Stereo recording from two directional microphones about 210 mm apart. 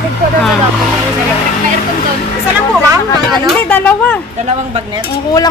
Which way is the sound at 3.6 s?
5° left (ahead or behind).